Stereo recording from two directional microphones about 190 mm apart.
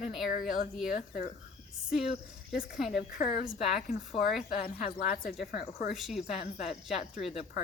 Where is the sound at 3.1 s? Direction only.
45° left (ahead or behind).